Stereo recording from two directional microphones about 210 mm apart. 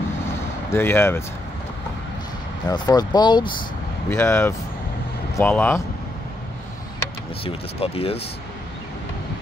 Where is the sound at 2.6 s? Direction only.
20° left (ahead or behind).